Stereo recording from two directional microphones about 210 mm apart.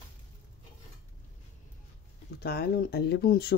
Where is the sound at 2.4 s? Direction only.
45° left (ahead or behind).